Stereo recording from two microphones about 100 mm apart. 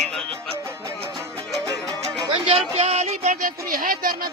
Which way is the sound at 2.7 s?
90° right.